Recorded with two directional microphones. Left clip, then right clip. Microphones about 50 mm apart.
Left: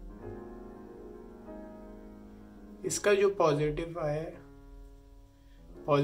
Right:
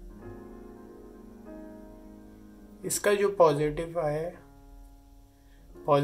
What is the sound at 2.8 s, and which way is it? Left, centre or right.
Speech, right.